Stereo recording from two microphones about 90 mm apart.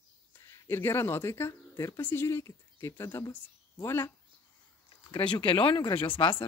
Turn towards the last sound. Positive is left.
turn(degrees=70)  # may be behind; listen again after turning